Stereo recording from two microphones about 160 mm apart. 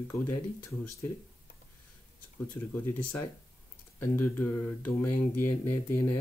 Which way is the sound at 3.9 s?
15° left (ahead or behind).